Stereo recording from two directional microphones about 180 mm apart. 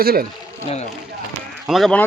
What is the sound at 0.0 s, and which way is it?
Speech, 55° right (ahead or behind).